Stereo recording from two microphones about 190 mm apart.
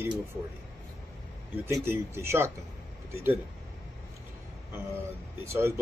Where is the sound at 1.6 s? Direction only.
10° right (ahead or behind).